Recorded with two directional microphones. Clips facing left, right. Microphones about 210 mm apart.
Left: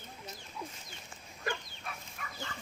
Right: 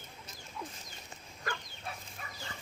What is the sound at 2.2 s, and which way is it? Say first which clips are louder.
Dog: left 4 dB; 30° right (ahead or behind).